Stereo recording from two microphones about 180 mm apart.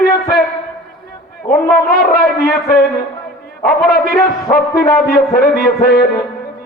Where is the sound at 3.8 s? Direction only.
55° left (ahead or behind).